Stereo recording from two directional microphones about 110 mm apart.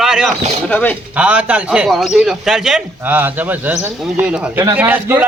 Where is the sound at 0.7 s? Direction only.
15° left (ahead or behind).